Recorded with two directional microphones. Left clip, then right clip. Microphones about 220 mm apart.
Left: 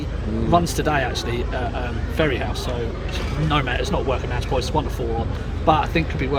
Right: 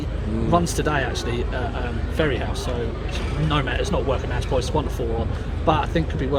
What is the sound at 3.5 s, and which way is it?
Speech, 20° left (ahead or behind).